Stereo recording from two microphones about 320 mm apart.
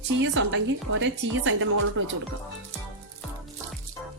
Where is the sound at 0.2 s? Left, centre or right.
Right.